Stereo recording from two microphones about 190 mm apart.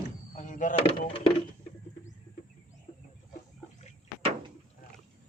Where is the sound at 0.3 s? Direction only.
40° left (ahead or behind).